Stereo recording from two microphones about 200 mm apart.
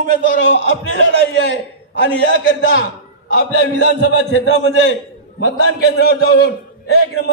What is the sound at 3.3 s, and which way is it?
A man's voice, 60° left (ahead or behind).